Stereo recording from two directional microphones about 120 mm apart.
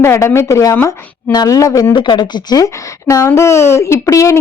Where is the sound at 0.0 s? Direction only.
20° left (ahead or behind).